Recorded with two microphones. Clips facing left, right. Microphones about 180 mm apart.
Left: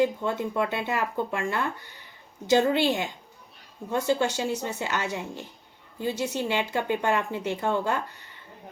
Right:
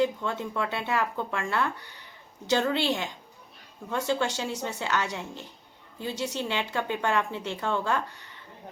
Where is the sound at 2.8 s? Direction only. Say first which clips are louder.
Left 3 dB; 55° left (ahead or behind).